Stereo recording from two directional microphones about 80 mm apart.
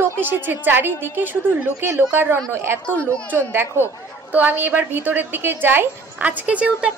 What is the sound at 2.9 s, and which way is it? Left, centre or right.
Speech, centre.